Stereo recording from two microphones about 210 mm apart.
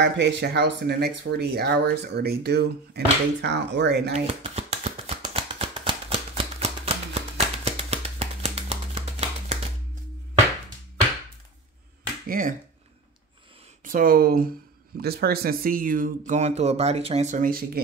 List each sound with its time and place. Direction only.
0.0 s speech: 55° right (ahead or behind)
4.1 s shuffling cards: 30° right (ahead or behind)
12.3 s speech: 40° right (ahead or behind)
13.8 s speech: 40° right (ahead or behind)